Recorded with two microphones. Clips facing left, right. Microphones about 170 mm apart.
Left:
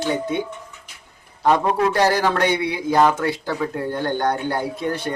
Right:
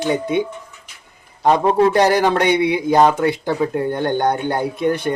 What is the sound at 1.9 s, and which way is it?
Speech, 15° right (ahead or behind).